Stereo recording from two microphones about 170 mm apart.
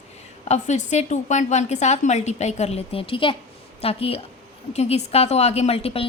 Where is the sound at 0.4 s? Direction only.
40° left (ahead or behind).